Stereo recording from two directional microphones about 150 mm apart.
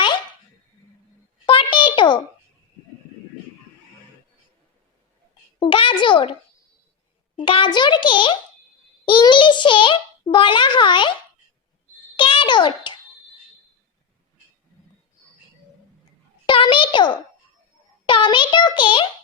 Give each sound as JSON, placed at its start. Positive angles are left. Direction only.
{"t": 1.5, "sound": "a sound", "side_deg": 35}
{"t": 5.5, "sound": "a child's voice", "side_deg": 35}
{"t": 7.4, "sound": "a child's voice", "side_deg": 35}
{"t": 12.1, "sound": "babbling", "side_deg": 35}
{"t": 16.5, "sound": "a sound", "side_deg": 35}
{"t": 18.0, "sound": "a child's voice", "side_deg": 35}